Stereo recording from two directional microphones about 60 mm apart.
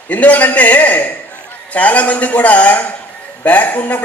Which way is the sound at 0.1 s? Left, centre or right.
Left.